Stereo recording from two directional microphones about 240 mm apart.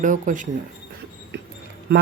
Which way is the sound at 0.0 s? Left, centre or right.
Right.